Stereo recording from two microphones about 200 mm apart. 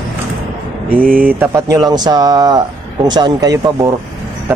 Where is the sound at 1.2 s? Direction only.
10° right (ahead or behind).